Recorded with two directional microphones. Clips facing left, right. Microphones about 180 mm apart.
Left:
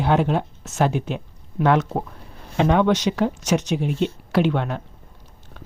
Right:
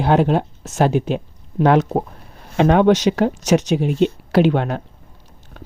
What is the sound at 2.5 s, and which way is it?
Speech, 60° right (ahead or behind).